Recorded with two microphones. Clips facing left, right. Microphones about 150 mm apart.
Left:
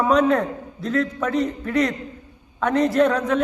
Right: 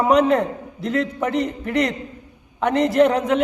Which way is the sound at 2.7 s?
15° right (ahead or behind).